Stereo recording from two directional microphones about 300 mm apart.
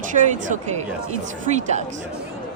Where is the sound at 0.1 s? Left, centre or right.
Right.